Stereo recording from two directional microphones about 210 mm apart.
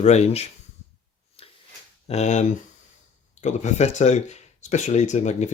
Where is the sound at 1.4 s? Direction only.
30° left (ahead or behind).